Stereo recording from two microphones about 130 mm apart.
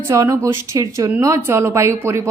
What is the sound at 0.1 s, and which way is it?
Speech, 25° right (ahead or behind).